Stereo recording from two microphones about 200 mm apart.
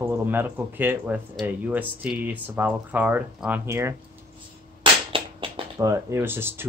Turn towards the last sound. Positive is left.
turn(degrees=-10)  # may be behind; listen again after turning